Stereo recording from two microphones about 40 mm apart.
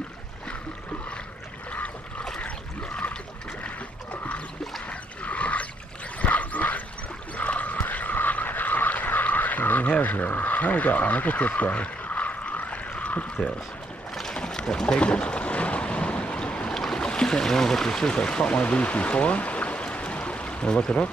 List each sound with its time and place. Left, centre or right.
3.6 s boat: left
4.8 s a sound: left
12.1 s pour: left
14.3 s boat: left
16.7 s boat: centre
17.0 s speech: left